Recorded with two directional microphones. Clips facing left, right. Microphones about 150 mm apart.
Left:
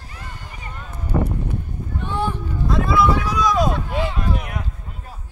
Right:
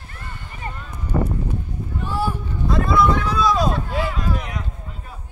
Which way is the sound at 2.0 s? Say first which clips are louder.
Even; 5° right (ahead or behind).